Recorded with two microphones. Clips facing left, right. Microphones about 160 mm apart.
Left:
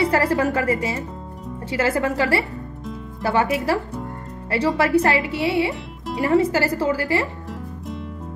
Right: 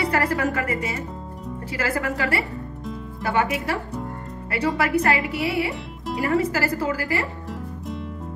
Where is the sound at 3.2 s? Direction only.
30° left (ahead or behind).